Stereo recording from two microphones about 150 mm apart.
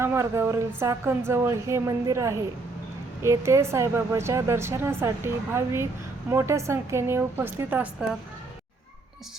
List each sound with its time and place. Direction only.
0.0 s a woman's voice: 15° right (ahead or behind)